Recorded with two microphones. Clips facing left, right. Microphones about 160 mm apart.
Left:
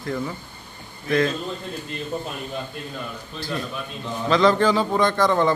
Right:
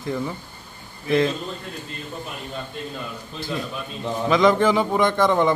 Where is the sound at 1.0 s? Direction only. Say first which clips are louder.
Right 1 dB; 25° right (ahead or behind).